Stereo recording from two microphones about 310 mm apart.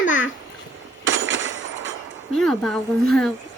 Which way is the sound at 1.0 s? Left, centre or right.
Right.